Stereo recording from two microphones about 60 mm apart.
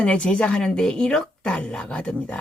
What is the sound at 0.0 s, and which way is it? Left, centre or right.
A woman's voice, centre.